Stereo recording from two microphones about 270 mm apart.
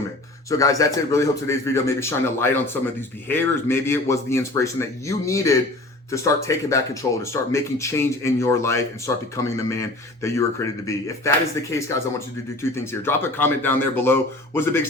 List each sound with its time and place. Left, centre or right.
0.5 s speech: centre